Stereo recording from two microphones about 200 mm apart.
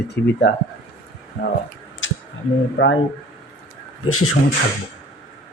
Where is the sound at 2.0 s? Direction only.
70° left (ahead or behind).